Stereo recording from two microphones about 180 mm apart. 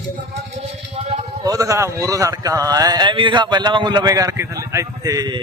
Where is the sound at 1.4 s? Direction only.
20° right (ahead or behind).